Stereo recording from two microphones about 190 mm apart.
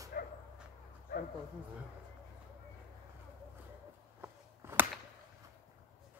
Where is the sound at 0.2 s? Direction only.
50° left (ahead or behind).